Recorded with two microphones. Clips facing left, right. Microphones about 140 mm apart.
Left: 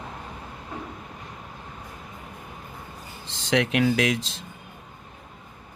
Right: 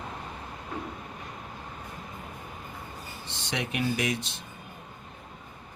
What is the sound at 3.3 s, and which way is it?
Speech, 90° left.